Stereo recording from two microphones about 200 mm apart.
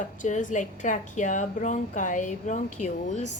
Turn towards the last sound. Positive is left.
turn(degrees=35)  # may be behind; listen again after turning